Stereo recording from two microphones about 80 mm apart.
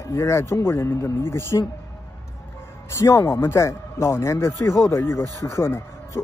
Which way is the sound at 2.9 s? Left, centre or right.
Left.